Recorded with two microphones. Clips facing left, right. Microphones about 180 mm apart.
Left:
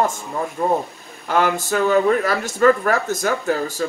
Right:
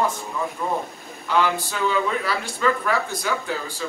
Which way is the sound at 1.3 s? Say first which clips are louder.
Left 3 dB; 45° left (ahead or behind).